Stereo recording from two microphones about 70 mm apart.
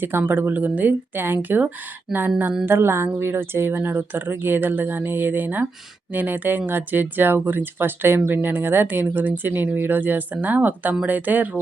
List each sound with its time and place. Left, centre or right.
0.0 s a woman's voice: right